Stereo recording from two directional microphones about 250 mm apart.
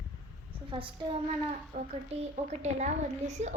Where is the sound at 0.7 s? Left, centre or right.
Centre.